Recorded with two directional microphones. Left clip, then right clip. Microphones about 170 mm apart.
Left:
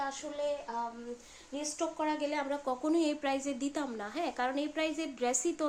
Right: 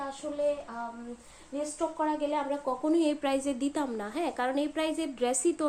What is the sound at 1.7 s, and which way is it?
Speech, 35° left (ahead or behind).